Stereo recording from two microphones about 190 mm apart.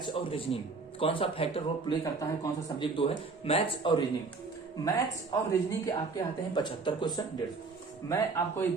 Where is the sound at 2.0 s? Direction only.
20° left (ahead or behind).